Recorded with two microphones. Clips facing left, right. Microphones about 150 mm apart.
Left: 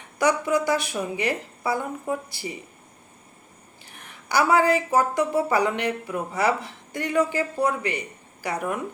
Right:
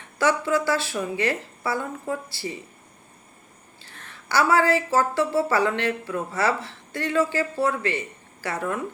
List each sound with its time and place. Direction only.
0.2 s a woman's voice: 15° left (ahead or behind)
3.8 s a woman's voice: 15° left (ahead or behind)